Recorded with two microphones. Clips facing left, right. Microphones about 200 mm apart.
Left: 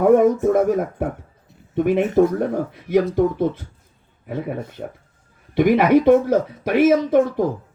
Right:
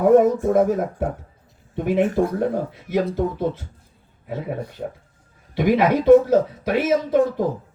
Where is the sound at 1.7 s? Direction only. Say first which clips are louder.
Left 3 dB; 55° left (ahead or behind).